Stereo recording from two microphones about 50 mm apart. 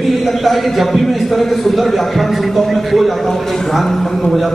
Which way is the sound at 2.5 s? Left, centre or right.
Centre.